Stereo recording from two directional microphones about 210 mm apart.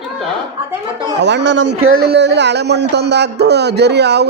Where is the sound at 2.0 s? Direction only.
50° right (ahead or behind).